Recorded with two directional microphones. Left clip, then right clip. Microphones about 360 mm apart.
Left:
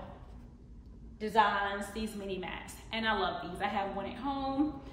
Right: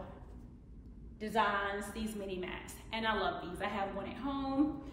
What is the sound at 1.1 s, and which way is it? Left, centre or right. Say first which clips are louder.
A woman's voice: left 4 dB; centre.